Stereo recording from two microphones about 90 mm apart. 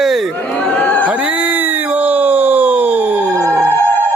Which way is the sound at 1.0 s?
15° right (ahead or behind).